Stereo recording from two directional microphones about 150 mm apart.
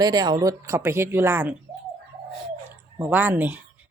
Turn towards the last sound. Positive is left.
turn(degrees=-10)  # may be behind; listen again after turning